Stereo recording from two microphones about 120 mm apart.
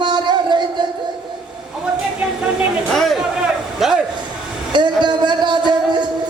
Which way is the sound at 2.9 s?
Centre (ahead or behind).